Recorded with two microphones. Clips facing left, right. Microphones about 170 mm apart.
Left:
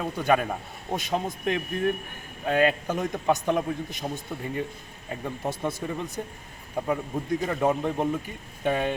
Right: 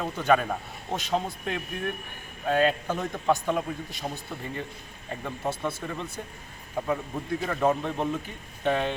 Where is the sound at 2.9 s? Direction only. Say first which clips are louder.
Left 1 dB; 15° left (ahead or behind).